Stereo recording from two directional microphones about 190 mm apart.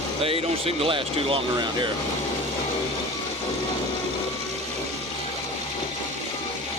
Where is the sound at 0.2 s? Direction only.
30° right (ahead or behind).